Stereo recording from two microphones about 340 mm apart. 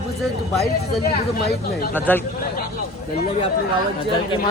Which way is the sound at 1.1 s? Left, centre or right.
Left.